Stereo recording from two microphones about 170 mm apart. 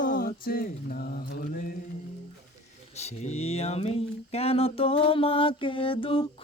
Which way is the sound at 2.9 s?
40° left (ahead or behind).